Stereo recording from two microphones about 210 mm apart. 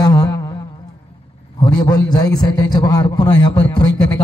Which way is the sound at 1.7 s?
20° left (ahead or behind).